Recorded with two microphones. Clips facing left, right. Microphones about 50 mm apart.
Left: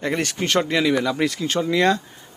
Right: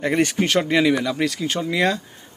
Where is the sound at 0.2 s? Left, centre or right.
Centre.